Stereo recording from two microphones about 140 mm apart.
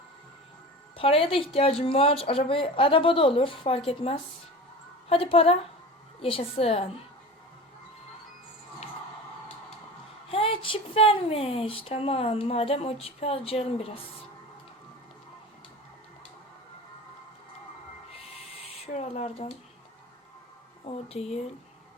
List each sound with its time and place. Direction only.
0.9 s a woman's voice: 40° left (ahead or behind)
10.2 s speech: 40° left (ahead or behind)
18.1 s a sound: 45° left (ahead or behind)
21.1 s speech: 45° left (ahead or behind)